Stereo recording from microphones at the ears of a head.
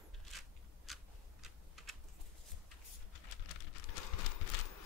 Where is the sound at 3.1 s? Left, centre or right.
Left.